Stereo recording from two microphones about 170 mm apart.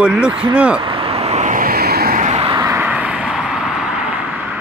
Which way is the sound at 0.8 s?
35° right (ahead or behind).